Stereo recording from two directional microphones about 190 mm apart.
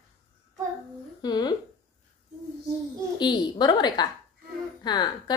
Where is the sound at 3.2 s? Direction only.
20° left (ahead or behind).